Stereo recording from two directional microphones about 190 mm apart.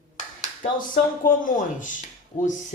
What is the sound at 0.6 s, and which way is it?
Speech, 45° left (ahead or behind).